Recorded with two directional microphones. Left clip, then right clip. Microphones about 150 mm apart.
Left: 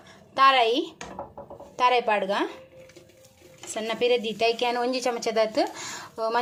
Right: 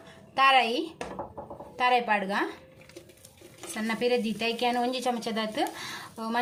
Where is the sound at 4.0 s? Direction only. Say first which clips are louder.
Left 4 dB; 45° left (ahead or behind).